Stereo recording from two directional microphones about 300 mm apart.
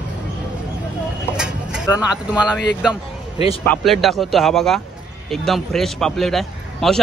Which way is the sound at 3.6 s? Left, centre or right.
Centre.